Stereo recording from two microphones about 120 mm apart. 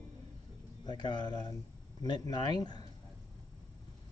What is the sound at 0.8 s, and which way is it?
Speech, 35° left (ahead or behind).